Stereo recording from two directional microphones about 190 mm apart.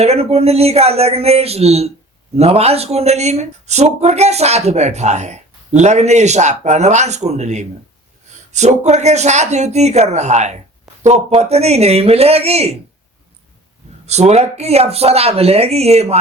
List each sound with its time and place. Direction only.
0.0 s speech: 35° right (ahead or behind)
14.1 s speech: 35° right (ahead or behind)